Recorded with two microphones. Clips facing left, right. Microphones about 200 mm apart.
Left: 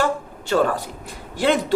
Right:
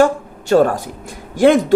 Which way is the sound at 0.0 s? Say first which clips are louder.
Right 8 dB; 45° right (ahead or behind).